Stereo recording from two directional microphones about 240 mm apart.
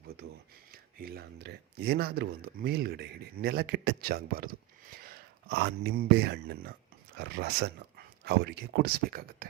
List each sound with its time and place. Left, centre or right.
0.7 s speech: right